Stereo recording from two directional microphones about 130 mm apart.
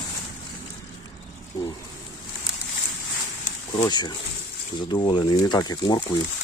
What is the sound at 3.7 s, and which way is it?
Speech, 30° left (ahead or behind).